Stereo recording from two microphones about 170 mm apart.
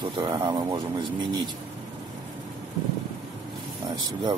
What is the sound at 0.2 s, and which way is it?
Speech, 25° right (ahead or behind).